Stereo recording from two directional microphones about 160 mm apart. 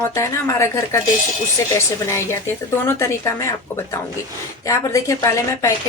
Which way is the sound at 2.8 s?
20° left (ahead or behind).